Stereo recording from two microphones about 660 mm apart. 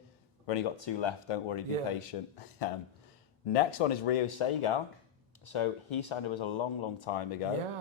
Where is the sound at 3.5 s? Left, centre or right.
Left.